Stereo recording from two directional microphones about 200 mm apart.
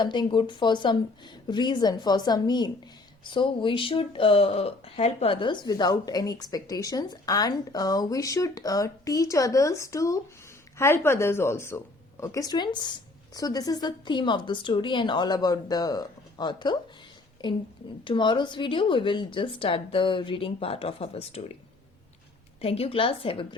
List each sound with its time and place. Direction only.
0.0 s speech: 20° left (ahead or behind)
22.6 s speech: 30° left (ahead or behind)